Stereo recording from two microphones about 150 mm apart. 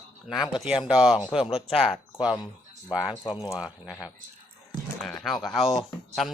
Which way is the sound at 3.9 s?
20° left (ahead or behind).